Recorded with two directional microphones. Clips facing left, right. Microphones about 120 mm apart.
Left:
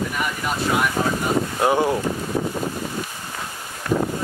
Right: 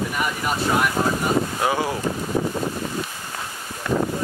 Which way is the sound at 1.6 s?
20° left (ahead or behind).